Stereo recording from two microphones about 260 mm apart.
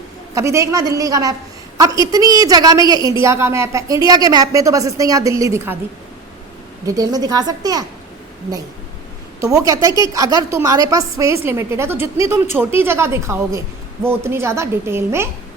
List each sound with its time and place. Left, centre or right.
0.3 s a woman's voice: centre
6.8 s a woman's voice: centre
9.4 s a woman's voice: centre